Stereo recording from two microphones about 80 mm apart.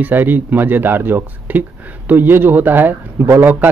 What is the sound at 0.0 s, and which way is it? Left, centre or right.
A man's voice, right.